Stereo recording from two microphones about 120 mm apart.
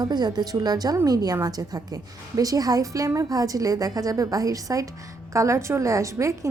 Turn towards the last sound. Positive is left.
turn(degrees=-25)  # may be behind; listen again after turning